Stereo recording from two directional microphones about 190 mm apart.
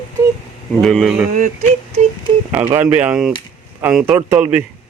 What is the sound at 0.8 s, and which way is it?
Speech, 5° left (ahead or behind).